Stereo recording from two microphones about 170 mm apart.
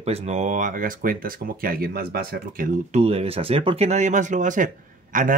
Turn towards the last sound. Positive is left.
turn(degrees=-50)  # may be behind; listen again after turning